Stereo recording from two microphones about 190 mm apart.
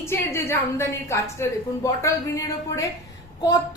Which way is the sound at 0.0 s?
15° left (ahead or behind).